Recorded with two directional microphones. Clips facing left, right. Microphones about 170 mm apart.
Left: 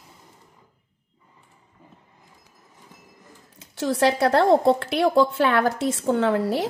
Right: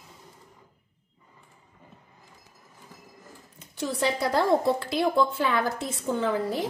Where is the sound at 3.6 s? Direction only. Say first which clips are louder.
Left 7 dB; 80° left.